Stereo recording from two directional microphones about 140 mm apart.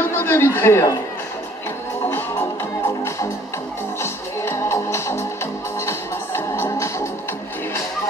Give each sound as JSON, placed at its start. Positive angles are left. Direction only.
{"t": 0.0, "sound": "speech", "side_deg": 15}
{"t": 4.0, "sound": "music", "side_deg": 20}